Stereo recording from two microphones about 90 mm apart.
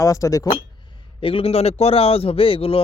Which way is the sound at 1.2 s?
90° left.